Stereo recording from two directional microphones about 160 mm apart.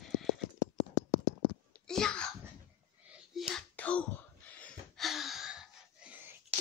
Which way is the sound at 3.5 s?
5° left (ahead or behind).